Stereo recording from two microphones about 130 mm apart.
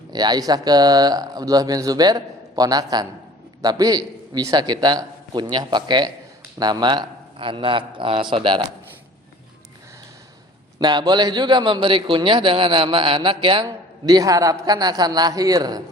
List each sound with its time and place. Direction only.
0.1 s speech: 30° right (ahead or behind)
10.8 s speech: 35° right (ahead or behind)
13.7 s a man's voice: 30° right (ahead or behind)